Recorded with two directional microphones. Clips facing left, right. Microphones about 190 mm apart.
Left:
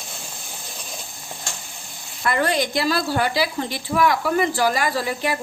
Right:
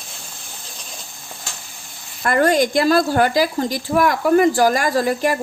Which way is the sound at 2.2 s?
45° right (ahead or behind).